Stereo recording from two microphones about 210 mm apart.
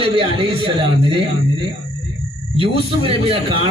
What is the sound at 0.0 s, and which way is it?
A man's voice, 25° right (ahead or behind).